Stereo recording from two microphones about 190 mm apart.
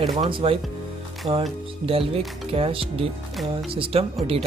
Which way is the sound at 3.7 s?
30° right (ahead or behind).